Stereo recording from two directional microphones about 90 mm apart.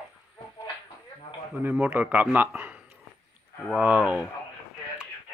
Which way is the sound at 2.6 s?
15° right (ahead or behind).